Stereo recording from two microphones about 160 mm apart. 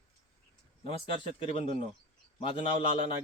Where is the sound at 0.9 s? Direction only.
35° left (ahead or behind).